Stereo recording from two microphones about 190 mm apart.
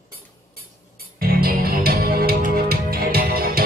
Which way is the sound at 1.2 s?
50° right (ahead or behind).